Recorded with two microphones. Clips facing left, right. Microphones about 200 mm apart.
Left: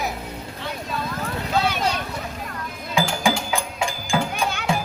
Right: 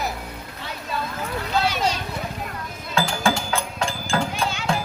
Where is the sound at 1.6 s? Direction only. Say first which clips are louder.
Even; 55° left (ahead or behind).